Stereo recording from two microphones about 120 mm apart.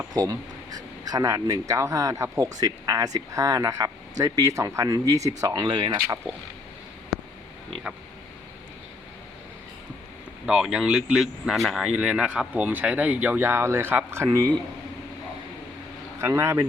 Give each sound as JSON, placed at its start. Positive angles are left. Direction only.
{"t": 0.1, "sound": "speech", "side_deg": -30}
{"t": 7.1, "sound": "a sound", "side_deg": 0}
{"t": 10.4, "sound": "speech", "side_deg": -5}
{"t": 14.3, "sound": "speech", "side_deg": -30}
{"t": 16.2, "sound": "speech", "side_deg": -20}